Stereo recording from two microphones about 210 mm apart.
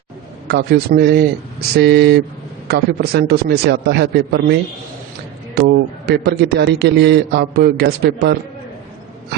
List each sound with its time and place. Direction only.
0.4 s a man's voice: 50° right (ahead or behind)
5.5 s a man's voice: 50° right (ahead or behind)